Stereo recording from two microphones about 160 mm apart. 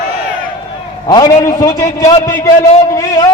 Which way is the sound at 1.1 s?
25° left (ahead or behind).